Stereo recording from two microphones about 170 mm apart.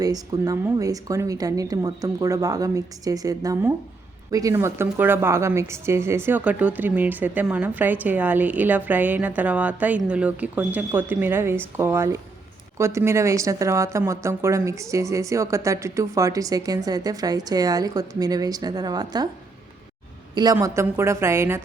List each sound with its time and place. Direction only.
0.0 s a woman's voice: 20° right (ahead or behind)
20.3 s a woman's voice: 20° right (ahead or behind)